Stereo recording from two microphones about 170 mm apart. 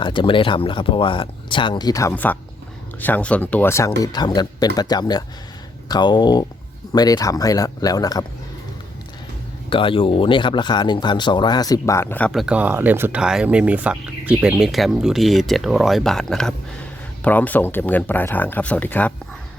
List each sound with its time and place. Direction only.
0.0 s speech: 30° left (ahead or behind)
9.6 s speech: 30° left (ahead or behind); by 12.3 s 10° left (ahead or behind)
12.3 s speech: 5° right (ahead or behind)